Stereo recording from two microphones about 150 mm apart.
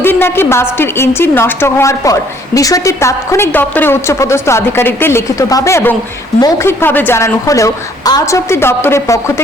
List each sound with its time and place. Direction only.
0.0 s a woman's voice: 15° left (ahead or behind)